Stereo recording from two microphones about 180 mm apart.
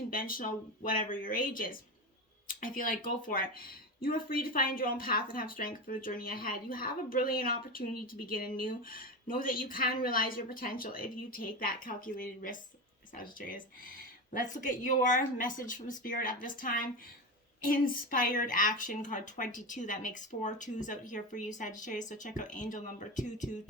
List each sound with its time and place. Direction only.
0.1 s speech: 50° left (ahead or behind)